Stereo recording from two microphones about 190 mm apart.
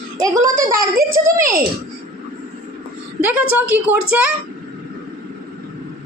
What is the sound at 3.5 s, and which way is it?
Speech, 10° right (ahead or behind).